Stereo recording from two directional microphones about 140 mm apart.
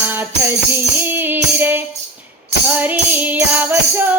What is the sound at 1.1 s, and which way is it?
Music, 15° right (ahead or behind).